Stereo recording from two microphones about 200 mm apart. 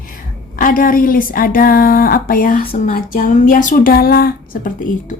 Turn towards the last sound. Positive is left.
turn(degrees=40)  # may be behind; listen again after turning